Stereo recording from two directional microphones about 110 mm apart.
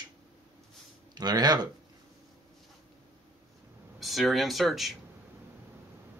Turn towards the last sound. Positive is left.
turn(degrees=0)  # may be behind; listen again after turning